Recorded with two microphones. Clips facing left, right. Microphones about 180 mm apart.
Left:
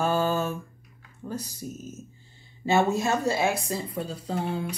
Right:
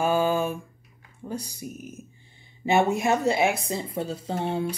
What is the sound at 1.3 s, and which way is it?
A woman's voice, 10° right (ahead or behind).